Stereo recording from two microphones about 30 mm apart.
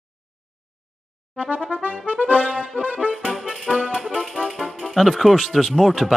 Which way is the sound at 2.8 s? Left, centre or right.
Left.